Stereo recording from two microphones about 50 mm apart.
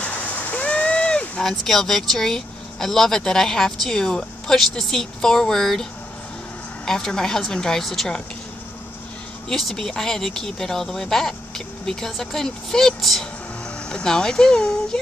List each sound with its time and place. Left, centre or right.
0.4 s a sound: left
1.4 s speech: centre
6.9 s speech: centre
9.5 s speech: centre
13.8 s speech: centre